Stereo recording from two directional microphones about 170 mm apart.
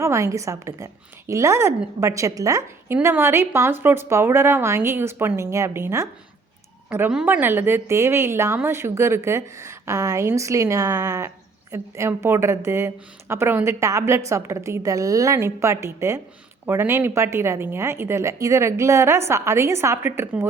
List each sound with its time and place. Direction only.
0.0 s a woman's voice: 15° right (ahead or behind)